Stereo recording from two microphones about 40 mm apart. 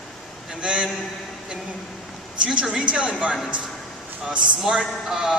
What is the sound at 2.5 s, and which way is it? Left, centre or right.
Speech, right.